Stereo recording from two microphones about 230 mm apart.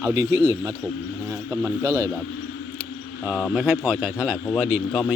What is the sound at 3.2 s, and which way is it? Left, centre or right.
Speech, centre.